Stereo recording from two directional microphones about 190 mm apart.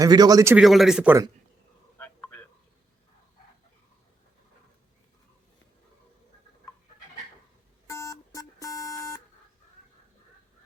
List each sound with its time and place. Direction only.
0.0 s speech: 20° right (ahead or behind)
0.5 s speech: centre (ahead or behind)
2.0 s a sound: 10° left (ahead or behind)
7.9 s telephone dialing: 15° left (ahead or behind)